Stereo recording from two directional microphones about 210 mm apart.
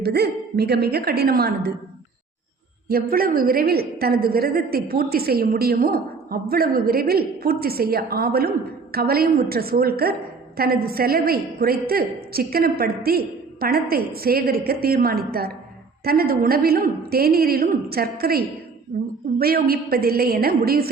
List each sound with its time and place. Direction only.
0.0 s a woman's voice: 50° right (ahead or behind)
2.9 s a woman's voice: 45° right (ahead or behind)